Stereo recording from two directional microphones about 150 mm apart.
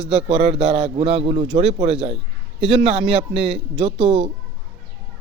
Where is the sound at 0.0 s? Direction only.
45° right (ahead or behind).